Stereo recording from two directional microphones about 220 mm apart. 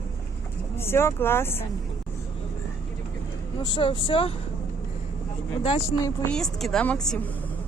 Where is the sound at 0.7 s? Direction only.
10° left (ahead or behind).